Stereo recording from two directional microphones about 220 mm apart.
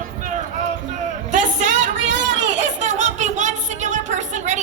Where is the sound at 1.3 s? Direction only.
35° right (ahead or behind).